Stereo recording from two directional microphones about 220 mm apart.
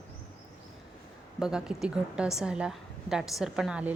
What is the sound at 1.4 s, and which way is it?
A woman's voice, 5° right (ahead or behind).